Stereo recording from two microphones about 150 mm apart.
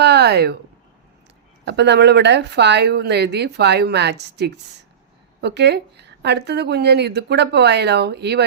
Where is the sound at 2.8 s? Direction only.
90° right.